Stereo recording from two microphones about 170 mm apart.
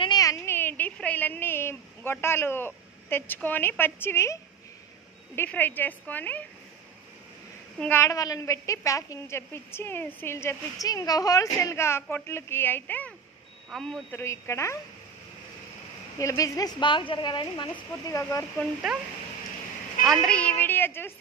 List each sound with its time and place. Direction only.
0.0 s a sound: 20° left (ahead or behind)
3.3 s a woman's voice: 10° left (ahead or behind)
7.8 s a woman's voice: 15° left (ahead or behind)
14.2 s a woman's voice: 15° left (ahead or behind)
16.2 s speech: 20° left (ahead or behind)
18.9 s a man's voice: centre (ahead or behind)
20.1 s a woman's voice: 5° left (ahead or behind)